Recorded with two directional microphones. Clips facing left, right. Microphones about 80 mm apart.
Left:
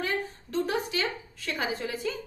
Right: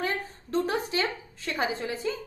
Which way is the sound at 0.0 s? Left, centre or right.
Right.